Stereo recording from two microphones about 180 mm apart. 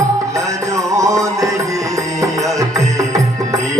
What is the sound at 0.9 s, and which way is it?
Music, 15° right (ahead or behind).